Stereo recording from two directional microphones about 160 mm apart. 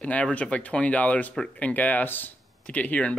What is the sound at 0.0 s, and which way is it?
Speech, 10° left (ahead or behind).